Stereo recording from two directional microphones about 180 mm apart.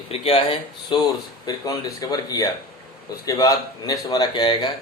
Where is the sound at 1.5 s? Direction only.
20° left (ahead or behind).